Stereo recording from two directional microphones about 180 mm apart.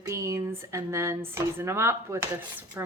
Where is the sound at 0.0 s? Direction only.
15° right (ahead or behind).